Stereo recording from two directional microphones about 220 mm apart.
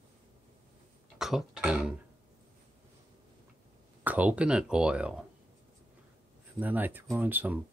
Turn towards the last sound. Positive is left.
turn(degrees=-10)  # may be behind; listen again after turning